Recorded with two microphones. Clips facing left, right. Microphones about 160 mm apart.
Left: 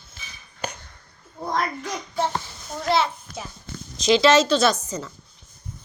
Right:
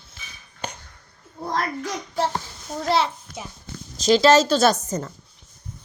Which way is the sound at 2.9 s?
35° right (ahead or behind).